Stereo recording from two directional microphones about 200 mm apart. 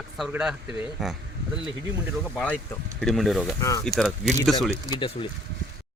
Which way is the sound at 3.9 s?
Centre (ahead or behind).